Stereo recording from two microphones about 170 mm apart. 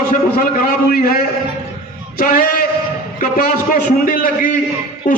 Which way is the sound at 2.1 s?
60° left (ahead or behind).